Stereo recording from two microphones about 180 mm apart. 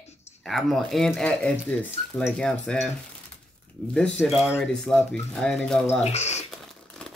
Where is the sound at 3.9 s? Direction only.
5° left (ahead or behind).